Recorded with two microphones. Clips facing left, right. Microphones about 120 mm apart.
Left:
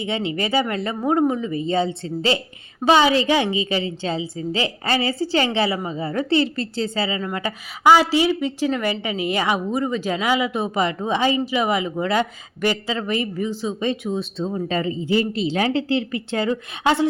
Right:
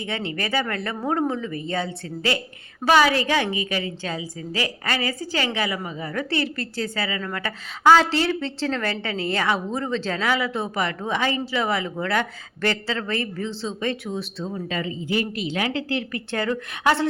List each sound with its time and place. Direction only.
0.0 s a woman's voice: 20° left (ahead or behind)